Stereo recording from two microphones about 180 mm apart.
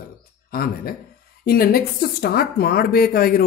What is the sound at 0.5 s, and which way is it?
Speech, 55° left (ahead or behind).